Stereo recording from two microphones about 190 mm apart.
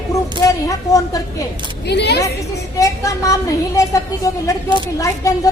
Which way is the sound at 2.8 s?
15° left (ahead or behind).